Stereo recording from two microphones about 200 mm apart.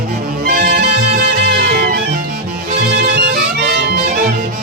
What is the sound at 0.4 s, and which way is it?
Music, 50° right (ahead or behind).